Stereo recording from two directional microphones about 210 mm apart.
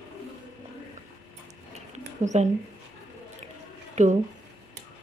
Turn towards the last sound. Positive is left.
turn(degrees=-35)  # may be behind; listen again after turning